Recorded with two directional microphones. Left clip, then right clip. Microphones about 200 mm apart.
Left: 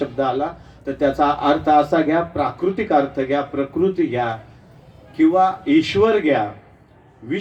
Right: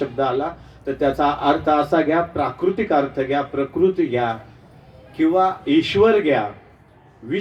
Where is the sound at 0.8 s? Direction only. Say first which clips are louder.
Left 1 dB; 40° left (ahead or behind).